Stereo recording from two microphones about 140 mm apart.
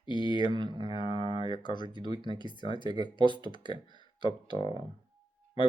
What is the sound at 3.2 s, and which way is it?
Speech, 35° left (ahead or behind).